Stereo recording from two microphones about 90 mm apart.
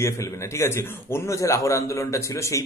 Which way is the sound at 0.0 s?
30° left (ahead or behind).